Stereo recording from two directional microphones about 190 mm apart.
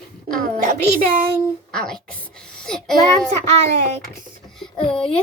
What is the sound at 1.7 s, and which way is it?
A child's voice, 5° left (ahead or behind).